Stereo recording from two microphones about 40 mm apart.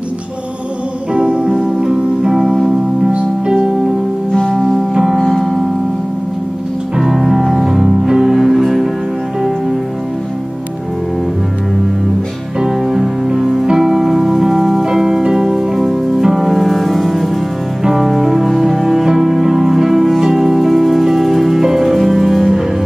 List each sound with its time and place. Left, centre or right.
1.1 s music: right
4.4 s music: centre
5.1 s music: centre
7.0 s music: centre
12.5 s music: centre